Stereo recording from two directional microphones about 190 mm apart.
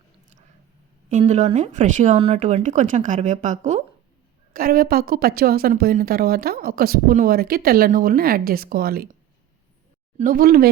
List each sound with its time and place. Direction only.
1.2 s speech: 35° right (ahead or behind)
4.5 s a woman's voice: 50° right (ahead or behind)
10.2 s a woman's voice: 45° right (ahead or behind)